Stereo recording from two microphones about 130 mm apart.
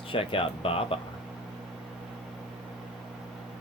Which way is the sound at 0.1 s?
45° left (ahead or behind).